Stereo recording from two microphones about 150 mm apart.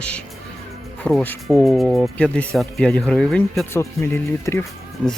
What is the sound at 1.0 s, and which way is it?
Speech, 10° left (ahead or behind).